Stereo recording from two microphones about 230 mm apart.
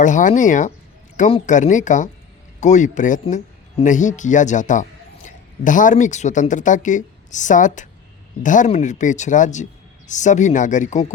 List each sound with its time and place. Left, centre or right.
0.0 s speech: left